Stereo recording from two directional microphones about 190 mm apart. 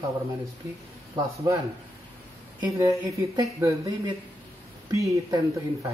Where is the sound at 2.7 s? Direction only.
15° right (ahead or behind).